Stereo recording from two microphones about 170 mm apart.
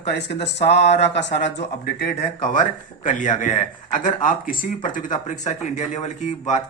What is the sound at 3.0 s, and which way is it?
Speech, 45° left (ahead or behind).